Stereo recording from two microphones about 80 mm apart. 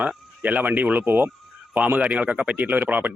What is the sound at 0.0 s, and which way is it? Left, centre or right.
Speech, centre.